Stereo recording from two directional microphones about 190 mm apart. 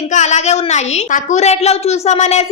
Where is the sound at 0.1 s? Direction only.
40° left (ahead or behind).